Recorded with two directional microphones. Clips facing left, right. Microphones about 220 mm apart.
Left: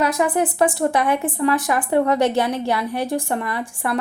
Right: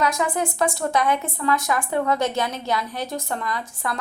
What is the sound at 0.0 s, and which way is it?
A woman's voice, 30° left (ahead or behind).